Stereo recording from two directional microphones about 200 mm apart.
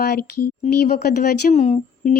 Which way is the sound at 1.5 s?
35° left (ahead or behind).